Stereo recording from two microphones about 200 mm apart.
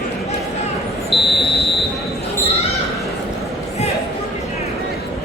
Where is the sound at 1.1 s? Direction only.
60° left (ahead or behind).